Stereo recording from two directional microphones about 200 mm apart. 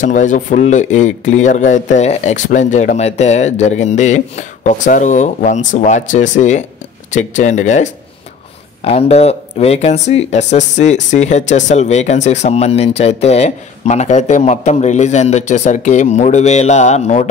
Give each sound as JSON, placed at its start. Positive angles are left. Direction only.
{"t": 0.0, "sound": "speech", "side_deg": 40}